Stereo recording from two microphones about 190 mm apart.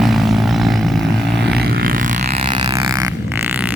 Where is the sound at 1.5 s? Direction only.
55° right (ahead or behind).